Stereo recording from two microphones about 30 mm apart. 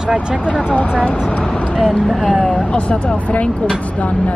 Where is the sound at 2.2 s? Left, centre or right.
Left.